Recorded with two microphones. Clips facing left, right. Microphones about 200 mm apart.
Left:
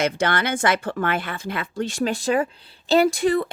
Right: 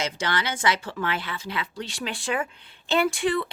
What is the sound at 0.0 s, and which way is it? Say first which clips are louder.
A woman's voice: left 6 dB; 55° left (ahead or behind).